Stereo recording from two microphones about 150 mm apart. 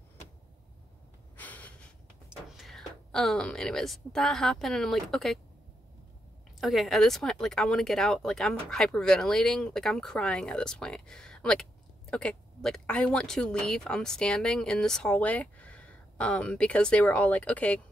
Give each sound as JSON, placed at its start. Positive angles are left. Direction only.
{"t": 1.3, "sound": "gasp", "side_deg": 10}
{"t": 2.2, "sound": "speech", "side_deg": 0}
{"t": 6.6, "sound": "speech", "side_deg": 0}